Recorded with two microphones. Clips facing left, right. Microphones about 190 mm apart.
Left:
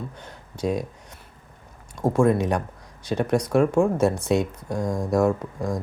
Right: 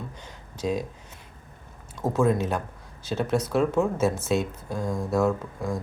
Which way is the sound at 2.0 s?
10° left (ahead or behind).